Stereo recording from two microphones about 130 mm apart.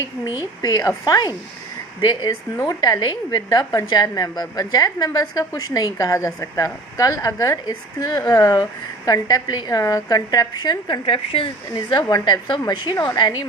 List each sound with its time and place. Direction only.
0.6 s a woman's voice: 30° left (ahead or behind)